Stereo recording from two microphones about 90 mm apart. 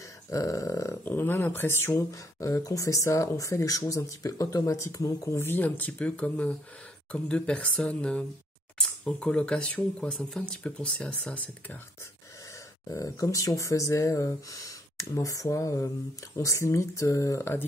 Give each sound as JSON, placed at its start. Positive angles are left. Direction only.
{"t": 0.3, "sound": "speech", "side_deg": 35}
{"t": 1.0, "sound": "speech", "side_deg": 25}
{"t": 12.8, "sound": "speech", "side_deg": 40}